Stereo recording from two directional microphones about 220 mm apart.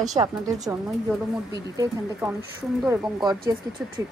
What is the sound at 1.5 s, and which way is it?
A woman's voice, 15° right (ahead or behind).